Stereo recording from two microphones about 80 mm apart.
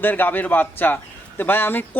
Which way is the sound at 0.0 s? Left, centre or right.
Left.